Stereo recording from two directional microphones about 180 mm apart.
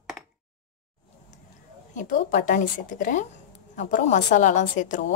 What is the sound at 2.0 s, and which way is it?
Speech, 45° left (ahead or behind).